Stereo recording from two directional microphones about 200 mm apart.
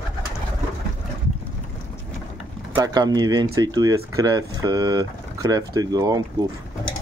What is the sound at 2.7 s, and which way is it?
Speech, 20° right (ahead or behind).